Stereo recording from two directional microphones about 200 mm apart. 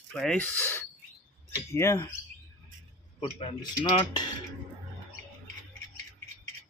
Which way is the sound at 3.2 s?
25° left (ahead or behind).